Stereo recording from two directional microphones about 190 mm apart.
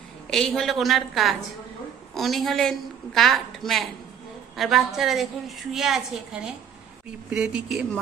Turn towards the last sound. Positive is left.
turn(degrees=0)  # may be behind; listen again after turning